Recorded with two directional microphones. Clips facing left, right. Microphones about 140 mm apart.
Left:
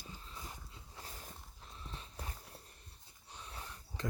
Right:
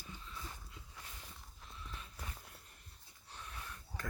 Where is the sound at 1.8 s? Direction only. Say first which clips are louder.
Left 2 dB; 30° left (ahead or behind).